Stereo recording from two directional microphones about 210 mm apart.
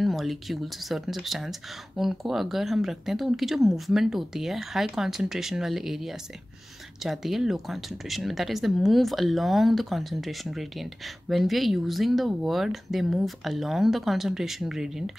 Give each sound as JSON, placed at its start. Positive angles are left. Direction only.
{"t": 0.0, "sound": "speech", "side_deg": 0}